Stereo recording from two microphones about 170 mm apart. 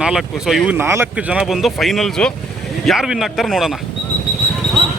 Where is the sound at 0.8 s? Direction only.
15° right (ahead or behind).